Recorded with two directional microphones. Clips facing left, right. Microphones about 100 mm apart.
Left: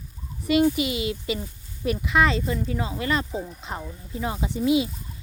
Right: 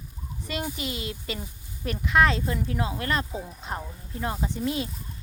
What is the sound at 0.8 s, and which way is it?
Speech, 5° left (ahead or behind).